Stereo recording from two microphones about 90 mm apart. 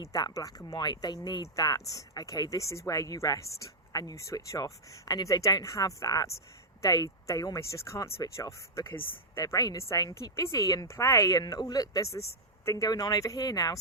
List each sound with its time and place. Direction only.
0.0 s a woman's voice: 40° left (ahead or behind)
0.7 s a woman's voice: 55° left (ahead or behind); by 8.8 s 35° left (ahead or behind)
8.9 s speech: 25° left (ahead or behind)
9.4 s a woman's voice: 40° left (ahead or behind)